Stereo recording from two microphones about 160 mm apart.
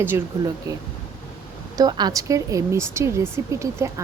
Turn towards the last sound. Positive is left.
turn(degrees=-20)  # may be behind; listen again after turning